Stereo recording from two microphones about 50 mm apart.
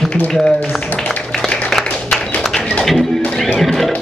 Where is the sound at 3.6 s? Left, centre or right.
Centre.